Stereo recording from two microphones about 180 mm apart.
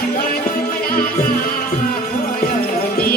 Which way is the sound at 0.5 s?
55° left (ahead or behind).